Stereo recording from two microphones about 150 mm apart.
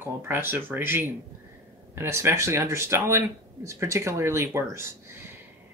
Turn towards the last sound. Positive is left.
turn(degrees=-20)  # may be behind; listen again after turning